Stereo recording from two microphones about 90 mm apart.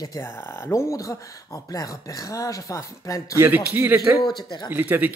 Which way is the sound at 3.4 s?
25° right (ahead or behind).